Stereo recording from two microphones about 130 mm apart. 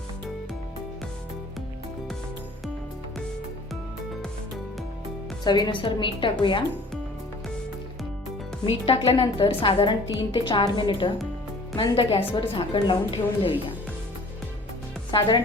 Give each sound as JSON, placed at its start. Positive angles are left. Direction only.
{"t": 5.5, "sound": "a woman's voice", "side_deg": 35}
{"t": 8.6, "sound": "a woman's voice", "side_deg": 45}